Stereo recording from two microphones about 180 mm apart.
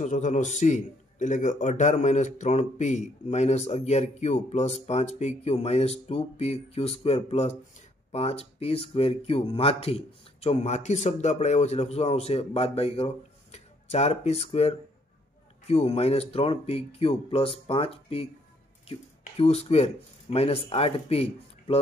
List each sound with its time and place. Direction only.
0.0 s a man's voice: 45° left (ahead or behind)